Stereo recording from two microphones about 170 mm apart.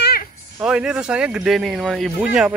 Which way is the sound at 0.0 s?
65° left (ahead or behind).